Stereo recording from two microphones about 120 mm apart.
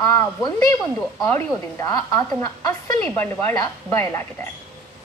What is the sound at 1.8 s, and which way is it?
A woman's voice, 30° left (ahead or behind).